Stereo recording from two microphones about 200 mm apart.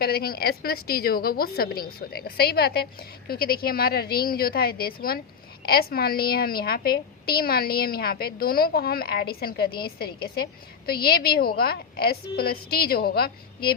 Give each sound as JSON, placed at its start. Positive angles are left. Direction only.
{"t": 0.0, "sound": "a woman's voice", "side_deg": 50}